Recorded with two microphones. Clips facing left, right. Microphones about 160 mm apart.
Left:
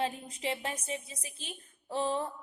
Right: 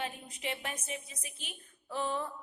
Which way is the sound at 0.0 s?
30° left (ahead or behind).